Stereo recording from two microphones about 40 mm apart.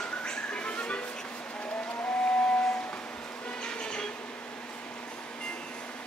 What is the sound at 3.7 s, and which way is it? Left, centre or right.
Bee, left.